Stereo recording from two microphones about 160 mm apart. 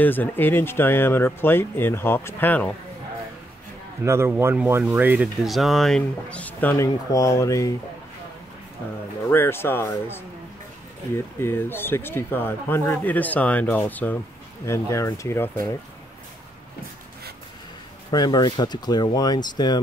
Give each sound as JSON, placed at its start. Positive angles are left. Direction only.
{"t": 0.0, "sound": "speech", "side_deg": 10}
{"t": 4.0, "sound": "speech", "side_deg": -15}
{"t": 9.3, "sound": "speech", "side_deg": 15}
{"t": 11.4, "sound": "speech", "side_deg": 15}
{"t": 18.1, "sound": "speech", "side_deg": 25}